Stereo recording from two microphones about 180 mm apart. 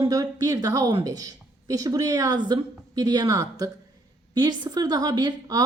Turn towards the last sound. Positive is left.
turn(degrees=-20)  # may be behind; listen again after turning